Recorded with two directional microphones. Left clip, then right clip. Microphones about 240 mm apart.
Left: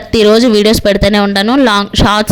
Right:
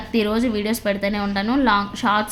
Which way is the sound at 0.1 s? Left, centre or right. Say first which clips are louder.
Left 14 dB; left.